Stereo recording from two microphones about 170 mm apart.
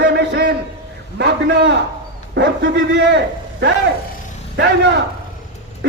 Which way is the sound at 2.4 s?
90° right.